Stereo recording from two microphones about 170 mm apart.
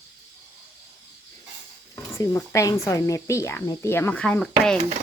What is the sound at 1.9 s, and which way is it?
Speech, 15° left (ahead or behind).